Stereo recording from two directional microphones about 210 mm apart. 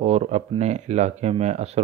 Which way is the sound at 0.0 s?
30° right (ahead or behind).